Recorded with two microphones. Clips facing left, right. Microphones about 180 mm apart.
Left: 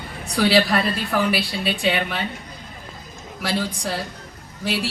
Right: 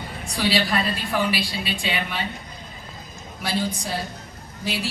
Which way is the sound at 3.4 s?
80° left.